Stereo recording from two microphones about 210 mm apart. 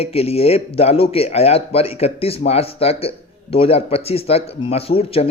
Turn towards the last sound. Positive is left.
turn(degrees=25)  # may be behind; listen again after turning